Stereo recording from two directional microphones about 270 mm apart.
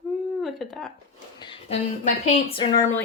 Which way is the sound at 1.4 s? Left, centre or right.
Left.